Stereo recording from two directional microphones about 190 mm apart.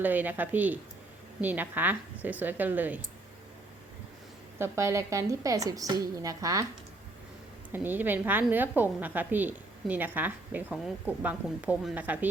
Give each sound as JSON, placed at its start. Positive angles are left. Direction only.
{"t": 0.0, "sound": "a woman's voice", "side_deg": -10}
{"t": 4.5, "sound": "a woman's voice", "side_deg": -15}
{"t": 7.7, "sound": "a woman's voice", "side_deg": -10}